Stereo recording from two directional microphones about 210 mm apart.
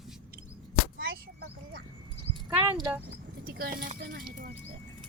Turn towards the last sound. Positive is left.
turn(degrees=-40)  # may be behind; listen again after turning